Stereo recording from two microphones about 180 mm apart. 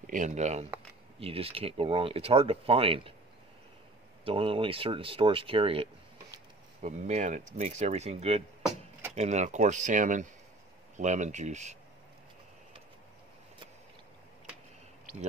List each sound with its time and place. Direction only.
0.0 s speech: 45° right (ahead or behind)
4.2 s speech: 30° right (ahead or behind)